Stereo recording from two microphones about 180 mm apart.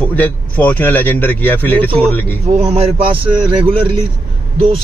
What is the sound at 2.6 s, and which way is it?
Speech, 35° right (ahead or behind).